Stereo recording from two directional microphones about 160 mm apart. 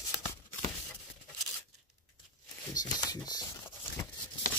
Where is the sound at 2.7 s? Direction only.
25° left (ahead or behind).